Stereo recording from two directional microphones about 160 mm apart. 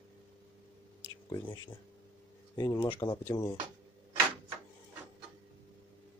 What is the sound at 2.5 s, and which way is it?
Speech, 25° left (ahead or behind).